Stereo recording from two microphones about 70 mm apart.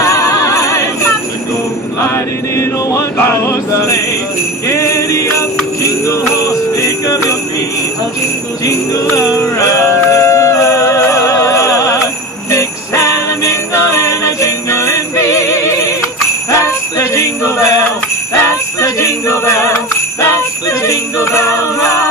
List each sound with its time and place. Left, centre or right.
0.0 s jingle bell: left
2.1 s music: left
4.6 s jingle bell: left
9.4 s jingle bell: left